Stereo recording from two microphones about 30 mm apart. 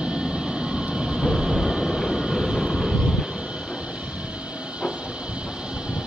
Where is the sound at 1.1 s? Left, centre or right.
Centre.